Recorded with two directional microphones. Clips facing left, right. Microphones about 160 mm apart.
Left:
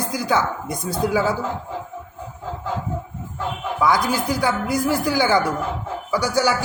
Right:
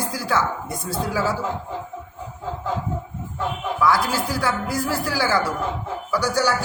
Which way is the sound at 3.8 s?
20° left (ahead or behind).